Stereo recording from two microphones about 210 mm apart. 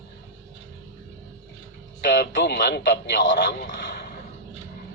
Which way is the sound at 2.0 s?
55° left (ahead or behind).